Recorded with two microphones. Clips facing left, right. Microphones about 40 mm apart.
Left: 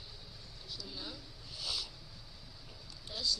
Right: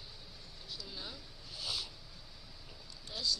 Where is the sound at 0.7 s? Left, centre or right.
Centre.